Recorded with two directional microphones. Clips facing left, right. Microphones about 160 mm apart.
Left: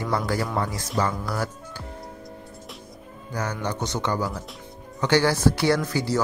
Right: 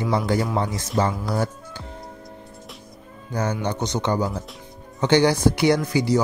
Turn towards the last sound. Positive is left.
turn(degrees=-15)  # may be behind; listen again after turning